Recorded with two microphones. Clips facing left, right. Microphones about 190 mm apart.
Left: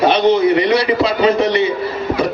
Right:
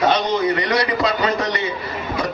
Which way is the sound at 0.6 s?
25° left (ahead or behind).